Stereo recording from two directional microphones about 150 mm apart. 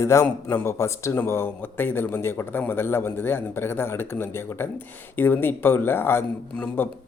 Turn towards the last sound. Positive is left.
turn(degrees=10)  # may be behind; listen again after turning